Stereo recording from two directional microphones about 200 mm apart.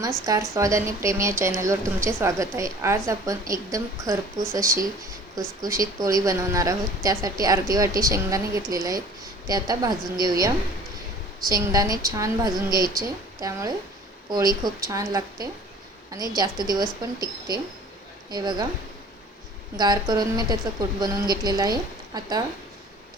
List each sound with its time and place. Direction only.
0.3 s a woman's voice: 15° right (ahead or behind)
19.7 s a woman's voice: 20° right (ahead or behind)